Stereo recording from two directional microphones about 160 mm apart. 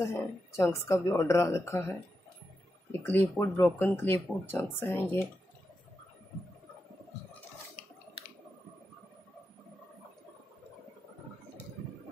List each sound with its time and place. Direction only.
0.0 s speech: 15° left (ahead or behind)
3.0 s speech: 15° left (ahead or behind)